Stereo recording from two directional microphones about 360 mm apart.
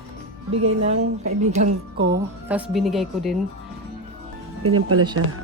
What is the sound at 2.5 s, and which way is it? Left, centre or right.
Speech, centre.